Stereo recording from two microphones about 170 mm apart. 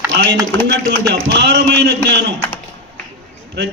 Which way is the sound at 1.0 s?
80° right.